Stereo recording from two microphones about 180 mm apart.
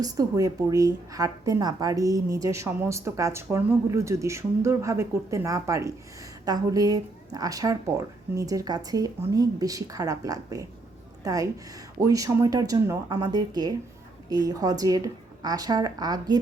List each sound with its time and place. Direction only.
0.0 s a woman's voice: 20° right (ahead or behind)